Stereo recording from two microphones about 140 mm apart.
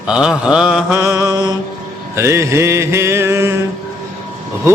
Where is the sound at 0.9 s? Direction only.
20° right (ahead or behind).